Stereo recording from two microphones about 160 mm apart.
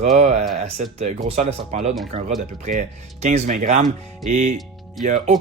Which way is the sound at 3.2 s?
45° right (ahead or behind).